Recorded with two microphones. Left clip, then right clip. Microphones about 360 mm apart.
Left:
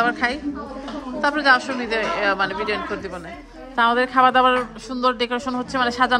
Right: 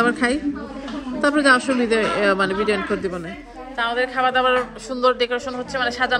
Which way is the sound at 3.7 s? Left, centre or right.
Left.